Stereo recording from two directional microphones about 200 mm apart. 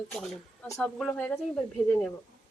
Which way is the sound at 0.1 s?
Centre (ahead or behind).